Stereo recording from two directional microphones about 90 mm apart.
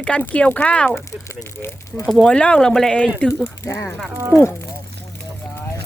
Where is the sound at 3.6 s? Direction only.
30° left (ahead or behind).